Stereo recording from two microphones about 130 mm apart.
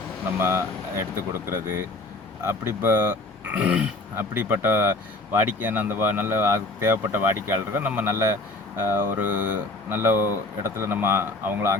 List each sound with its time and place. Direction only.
0.3 s speech: 20° right (ahead or behind)